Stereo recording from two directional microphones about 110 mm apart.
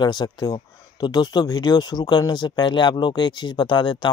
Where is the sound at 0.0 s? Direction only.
40° left (ahead or behind).